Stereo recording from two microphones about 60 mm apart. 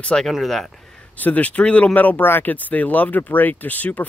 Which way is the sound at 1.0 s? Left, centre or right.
Left.